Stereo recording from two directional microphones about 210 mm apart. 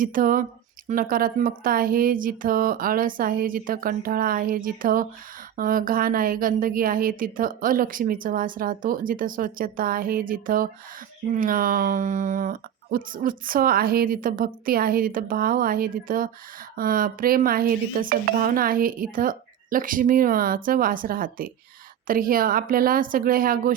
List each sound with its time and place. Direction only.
0.0 s a woman's voice: 40° right (ahead or behind)